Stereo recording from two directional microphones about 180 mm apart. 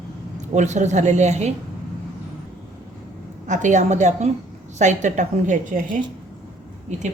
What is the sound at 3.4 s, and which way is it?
A woman's voice, 45° right (ahead or behind).